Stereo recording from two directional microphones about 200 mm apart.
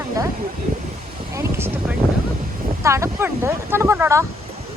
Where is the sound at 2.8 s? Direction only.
15° right (ahead or behind).